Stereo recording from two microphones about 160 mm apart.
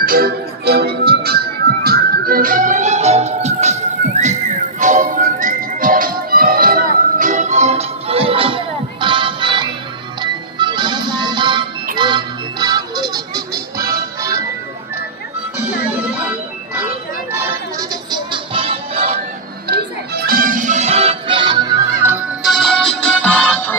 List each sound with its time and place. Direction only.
0.0 s music: 65° right (ahead or behind); by 14.4 s 20° right (ahead or behind)
17.7 s music: 30° right (ahead or behind)
19.6 s music: 75° right (ahead or behind); by 21.8 s 25° right (ahead or behind)
22.0 s music: 10° right (ahead or behind)
22.4 s music: centre (ahead or behind)